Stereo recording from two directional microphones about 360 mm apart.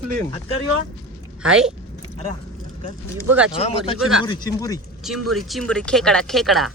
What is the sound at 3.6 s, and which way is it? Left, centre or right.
Speech, centre.